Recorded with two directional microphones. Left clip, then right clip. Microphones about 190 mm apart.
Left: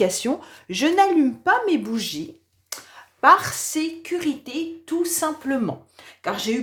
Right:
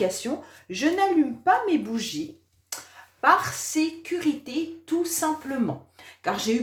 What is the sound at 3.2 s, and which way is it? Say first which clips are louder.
Speech: left 5 dB; 40° left (ahead or behind).